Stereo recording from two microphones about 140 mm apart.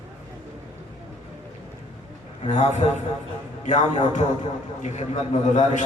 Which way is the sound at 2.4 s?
55° left (ahead or behind).